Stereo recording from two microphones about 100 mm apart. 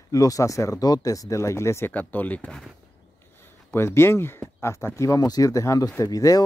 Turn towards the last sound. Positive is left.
turn(degrees=35)  # may be behind; listen again after turning